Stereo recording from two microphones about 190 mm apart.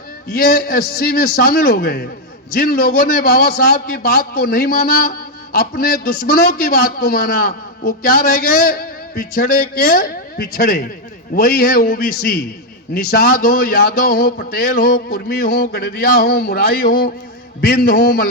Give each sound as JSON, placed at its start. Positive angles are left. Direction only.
{"t": 0.3, "sound": "a man's voice", "side_deg": 50}